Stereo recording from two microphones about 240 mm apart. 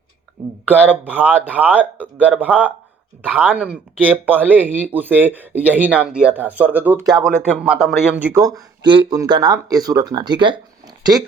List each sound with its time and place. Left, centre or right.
0.7 s speech: centre
4.4 s speech: centre